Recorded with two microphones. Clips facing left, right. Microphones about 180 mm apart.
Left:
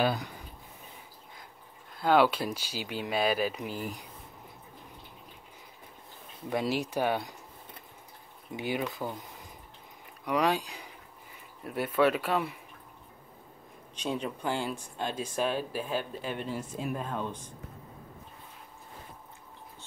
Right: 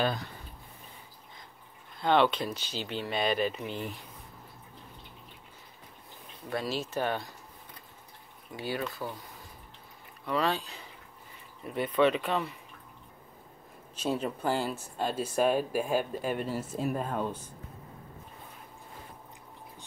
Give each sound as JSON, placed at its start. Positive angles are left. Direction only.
{"t": 0.0, "sound": "speech", "side_deg": 10}
{"t": 2.0, "sound": "speech", "side_deg": 5}
{"t": 6.5, "sound": "speech", "side_deg": 15}
{"t": 8.5, "sound": "speech", "side_deg": 20}
{"t": 10.2, "sound": "speech", "side_deg": 15}
{"t": 13.9, "sound": "speech", "side_deg": -5}